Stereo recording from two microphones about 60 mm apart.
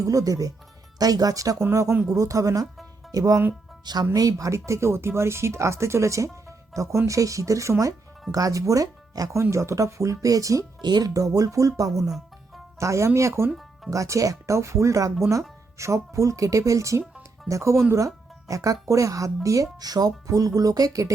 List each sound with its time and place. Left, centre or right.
0.0 s speech: right
0.9 s speech: right
1.7 s speech: right
3.1 s speech: right
8.3 s speech: right
9.4 s speech: right
12.8 s speech: right
13.9 s speech: right
17.9 s speech: right
19.8 s speech: right